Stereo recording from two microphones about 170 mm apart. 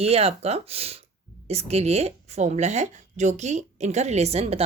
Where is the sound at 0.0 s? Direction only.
35° right (ahead or behind).